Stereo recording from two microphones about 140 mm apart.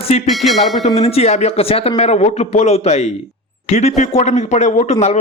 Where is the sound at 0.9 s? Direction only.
45° left (ahead or behind).